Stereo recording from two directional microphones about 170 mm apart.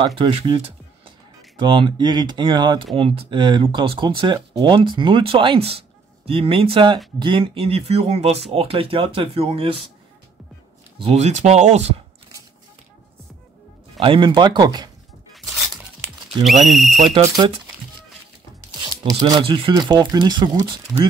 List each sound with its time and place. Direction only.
0.0 s speech: 30° right (ahead or behind)
11.0 s speech: 35° right (ahead or behind)
13.9 s speech: 30° right (ahead or behind)
16.6 s speech: centre (ahead or behind)
18.8 s speech: 25° right (ahead or behind)